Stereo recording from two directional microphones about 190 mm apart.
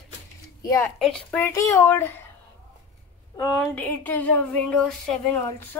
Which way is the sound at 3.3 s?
15° left (ahead or behind).